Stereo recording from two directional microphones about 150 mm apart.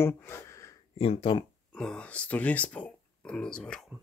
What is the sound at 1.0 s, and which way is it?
Speech, 40° left (ahead or behind).